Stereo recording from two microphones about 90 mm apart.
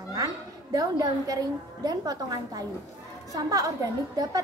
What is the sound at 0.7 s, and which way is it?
A woman's voice, 45° right (ahead or behind).